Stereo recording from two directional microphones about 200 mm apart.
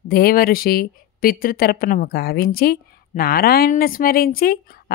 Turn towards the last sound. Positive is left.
turn(degrees=50)  # may be behind; listen again after turning